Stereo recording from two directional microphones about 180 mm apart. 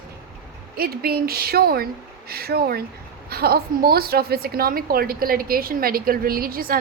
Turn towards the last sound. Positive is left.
turn(degrees=-55)  # may be behind; listen again after turning